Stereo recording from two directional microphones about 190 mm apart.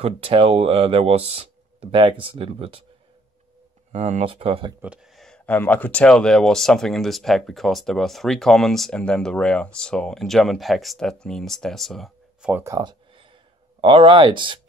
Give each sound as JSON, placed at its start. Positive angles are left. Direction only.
{"t": 0.0, "sound": "speech", "side_deg": -30}
{"t": 3.9, "sound": "speech", "side_deg": -40}
{"t": 4.8, "sound": "speech", "side_deg": -5}
{"t": 12.6, "sound": "a sound", "side_deg": -20}
{"t": 13.7, "sound": "speech", "side_deg": -25}